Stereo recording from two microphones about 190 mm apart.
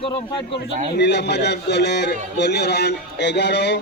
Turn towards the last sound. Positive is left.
turn(degrees=65)  # may be behind; listen again after turning